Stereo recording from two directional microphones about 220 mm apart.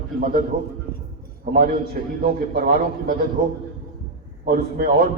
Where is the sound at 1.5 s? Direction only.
40° right (ahead or behind).